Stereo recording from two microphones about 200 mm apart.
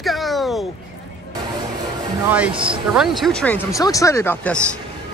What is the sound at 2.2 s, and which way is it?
Speech, 5° right (ahead or behind).